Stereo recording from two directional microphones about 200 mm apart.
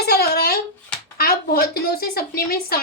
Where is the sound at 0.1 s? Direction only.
50° left (ahead or behind).